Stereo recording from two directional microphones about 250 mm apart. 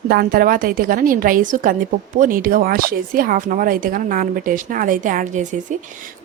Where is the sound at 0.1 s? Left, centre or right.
Right.